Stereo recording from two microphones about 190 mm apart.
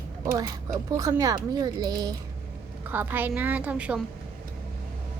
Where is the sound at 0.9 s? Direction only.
15° right (ahead or behind).